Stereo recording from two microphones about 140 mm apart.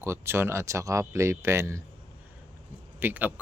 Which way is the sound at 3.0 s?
10° right (ahead or behind).